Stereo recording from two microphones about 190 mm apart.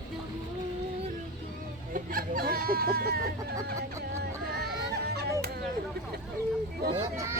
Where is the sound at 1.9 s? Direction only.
50° right (ahead or behind).